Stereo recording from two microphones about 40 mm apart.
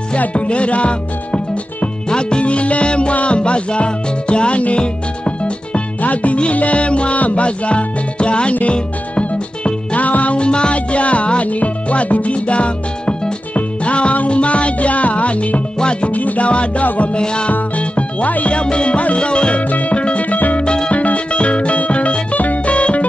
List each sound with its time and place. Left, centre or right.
0.2 s music: left
16.1 s music: left
16.8 s music: left
17.1 s music: left
17.5 s music: left
19.7 s music: left
20.6 s music: left
20.9 s music: left